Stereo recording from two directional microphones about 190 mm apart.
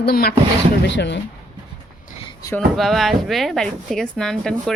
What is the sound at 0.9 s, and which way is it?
Speech, 65° left (ahead or behind).